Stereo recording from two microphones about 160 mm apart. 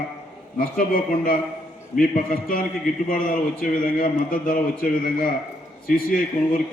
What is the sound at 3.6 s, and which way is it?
A man's voice, 65° left (ahead or behind).